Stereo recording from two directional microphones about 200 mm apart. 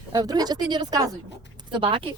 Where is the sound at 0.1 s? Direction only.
20° right (ahead or behind).